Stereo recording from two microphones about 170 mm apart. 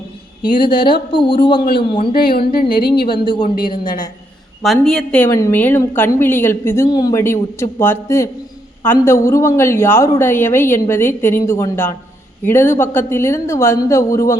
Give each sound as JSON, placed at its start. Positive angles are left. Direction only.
{"t": 0.9, "sound": "speech", "side_deg": 30}
{"t": 2.1, "sound": "speech", "side_deg": 60}
{"t": 3.1, "sound": "speech", "side_deg": 30}
{"t": 4.6, "sound": "a woman's voice", "side_deg": 0}
{"t": 5.3, "sound": "a woman's voice", "side_deg": 15}